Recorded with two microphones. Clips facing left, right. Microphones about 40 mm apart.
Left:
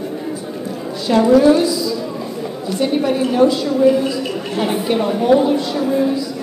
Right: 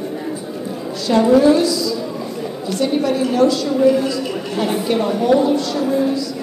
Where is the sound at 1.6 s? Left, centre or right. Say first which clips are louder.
Even; centre.